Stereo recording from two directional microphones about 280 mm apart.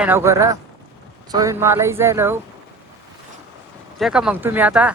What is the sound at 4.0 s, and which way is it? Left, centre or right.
Speech, centre.